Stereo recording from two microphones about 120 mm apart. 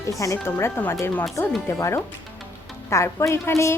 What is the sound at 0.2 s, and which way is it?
Speech, 25° left (ahead or behind).